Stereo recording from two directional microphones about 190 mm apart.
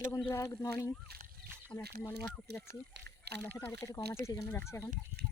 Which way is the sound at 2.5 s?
60° right (ahead or behind).